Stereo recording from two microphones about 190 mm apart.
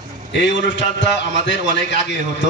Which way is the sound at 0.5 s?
75° left (ahead or behind).